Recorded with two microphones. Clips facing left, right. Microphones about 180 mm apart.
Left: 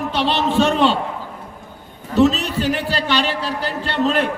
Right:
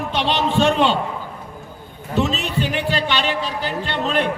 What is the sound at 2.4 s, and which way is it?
A man's voice, 40° left (ahead or behind).